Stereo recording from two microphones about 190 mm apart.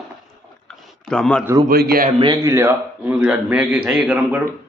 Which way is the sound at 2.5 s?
15° right (ahead or behind).